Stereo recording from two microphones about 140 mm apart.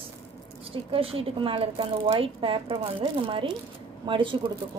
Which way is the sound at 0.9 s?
45° right (ahead or behind).